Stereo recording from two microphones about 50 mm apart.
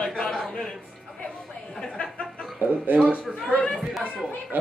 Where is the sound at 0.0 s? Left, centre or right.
Centre.